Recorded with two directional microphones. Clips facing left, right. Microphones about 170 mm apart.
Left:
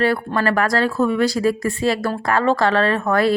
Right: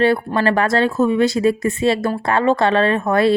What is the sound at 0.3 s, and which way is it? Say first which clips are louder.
Speech: right 2 dB; 25° right (ahead or behind).